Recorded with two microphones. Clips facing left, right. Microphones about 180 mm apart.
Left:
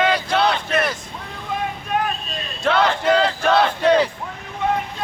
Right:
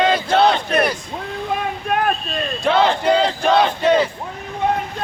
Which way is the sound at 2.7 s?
25° right (ahead or behind).